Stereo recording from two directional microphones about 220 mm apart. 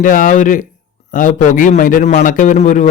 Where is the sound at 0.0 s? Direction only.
35° left (ahead or behind).